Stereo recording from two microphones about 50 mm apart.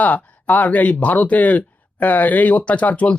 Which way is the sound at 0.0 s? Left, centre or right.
Left.